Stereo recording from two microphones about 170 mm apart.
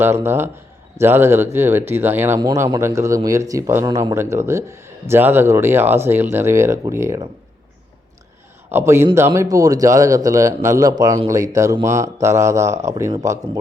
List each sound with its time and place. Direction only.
0.0 s a man's voice: 15° right (ahead or behind)
2.4 s a man's voice: 20° right (ahead or behind)
8.7 s a man's voice: 10° right (ahead or behind)